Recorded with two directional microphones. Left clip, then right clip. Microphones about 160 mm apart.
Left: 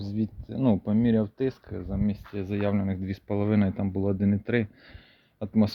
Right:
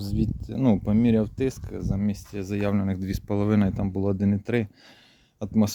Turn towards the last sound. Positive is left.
turn(degrees=-20)  # may be behind; listen again after turning